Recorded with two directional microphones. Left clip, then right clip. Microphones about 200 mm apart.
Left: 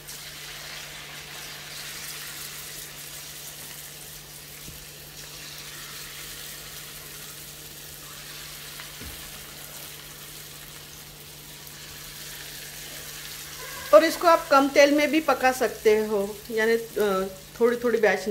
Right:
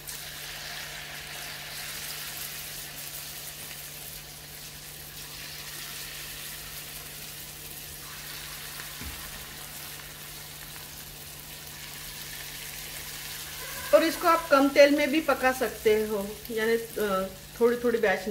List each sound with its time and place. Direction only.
13.9 s frying: 25° left (ahead or behind)